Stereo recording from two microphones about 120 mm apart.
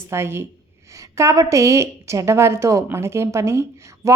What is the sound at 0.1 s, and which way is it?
A woman's voice, 20° right (ahead or behind).